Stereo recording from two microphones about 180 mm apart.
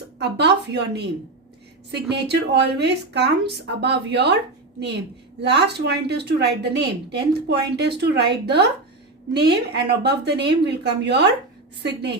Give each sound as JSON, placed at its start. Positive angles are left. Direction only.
{"t": 0.2, "sound": "a woman's voice", "side_deg": -70}
{"t": 5.4, "sound": "a woman's voice", "side_deg": -70}